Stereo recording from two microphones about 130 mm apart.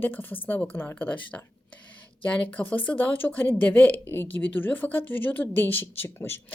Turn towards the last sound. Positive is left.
turn(degrees=20)  # may be behind; listen again after turning